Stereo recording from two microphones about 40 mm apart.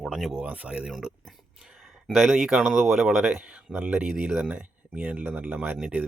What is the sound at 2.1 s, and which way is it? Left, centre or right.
Speech, centre.